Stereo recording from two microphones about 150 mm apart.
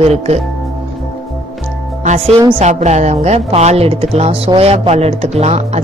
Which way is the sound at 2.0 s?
45° right (ahead or behind).